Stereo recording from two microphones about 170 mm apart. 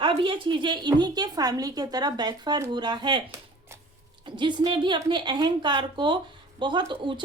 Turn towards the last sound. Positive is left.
turn(degrees=-30)  # may be behind; listen again after turning